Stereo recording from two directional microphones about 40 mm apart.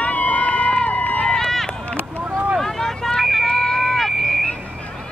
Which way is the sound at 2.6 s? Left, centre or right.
Centre.